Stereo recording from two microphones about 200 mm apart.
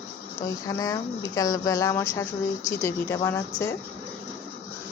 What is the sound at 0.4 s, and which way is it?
Speech, 15° left (ahead or behind).